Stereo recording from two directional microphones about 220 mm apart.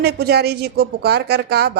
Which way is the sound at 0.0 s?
45° right (ahead or behind).